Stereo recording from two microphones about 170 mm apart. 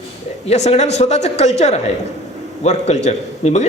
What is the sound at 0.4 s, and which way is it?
A man's voice, 40° left (ahead or behind).